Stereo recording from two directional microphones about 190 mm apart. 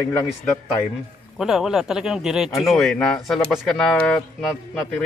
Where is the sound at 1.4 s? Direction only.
5° right (ahead or behind).